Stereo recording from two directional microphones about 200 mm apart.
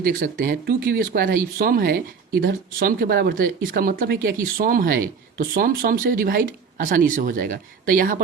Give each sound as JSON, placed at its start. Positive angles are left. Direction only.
{"t": 0.0, "sound": "speech", "side_deg": -45}